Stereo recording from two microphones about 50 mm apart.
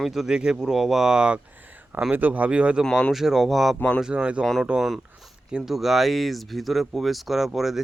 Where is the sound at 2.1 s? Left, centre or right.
Right.